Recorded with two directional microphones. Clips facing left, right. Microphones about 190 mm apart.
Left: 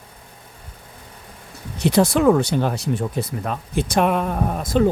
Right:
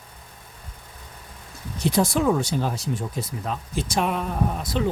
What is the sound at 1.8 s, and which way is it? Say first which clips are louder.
Speech: left 5 dB; 70° left (ahead or behind).